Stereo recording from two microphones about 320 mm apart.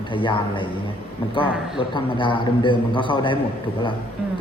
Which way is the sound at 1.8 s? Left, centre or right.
Centre.